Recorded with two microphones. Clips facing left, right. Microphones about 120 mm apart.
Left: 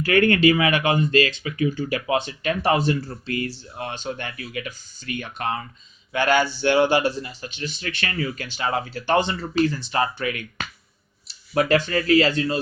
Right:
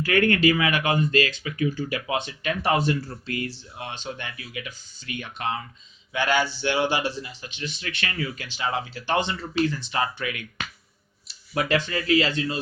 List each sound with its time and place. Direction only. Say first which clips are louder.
0.0 s speech: left 3 dB; 30° left (ahead or behind)
3.8 s speech: left 5 dB; 45° left (ahead or behind)